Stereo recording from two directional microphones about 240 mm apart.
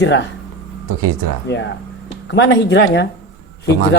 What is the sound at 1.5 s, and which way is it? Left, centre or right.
Speech, left.